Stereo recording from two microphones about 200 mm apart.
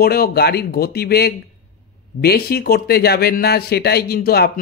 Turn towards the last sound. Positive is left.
turn(degrees=50)  # may be behind; listen again after turning